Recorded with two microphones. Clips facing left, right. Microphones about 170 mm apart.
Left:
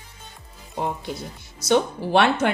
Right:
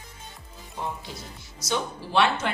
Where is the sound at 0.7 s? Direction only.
60° left (ahead or behind).